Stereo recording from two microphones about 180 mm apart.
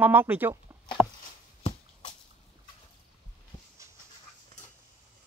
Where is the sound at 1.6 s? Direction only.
40° left (ahead or behind).